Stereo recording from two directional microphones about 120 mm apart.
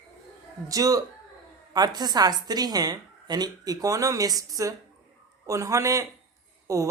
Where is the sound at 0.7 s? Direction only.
30° right (ahead or behind).